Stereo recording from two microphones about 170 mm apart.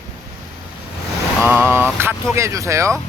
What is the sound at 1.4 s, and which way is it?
Speech, 10° right (ahead or behind).